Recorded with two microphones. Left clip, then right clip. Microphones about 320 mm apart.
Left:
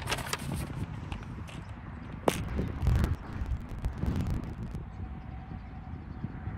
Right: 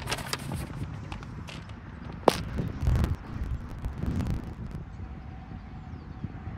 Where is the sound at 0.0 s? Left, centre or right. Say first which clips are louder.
Right 1 dB; centre.